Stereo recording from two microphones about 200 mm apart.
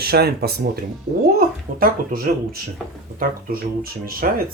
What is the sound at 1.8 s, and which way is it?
Speech, 45° right (ahead or behind).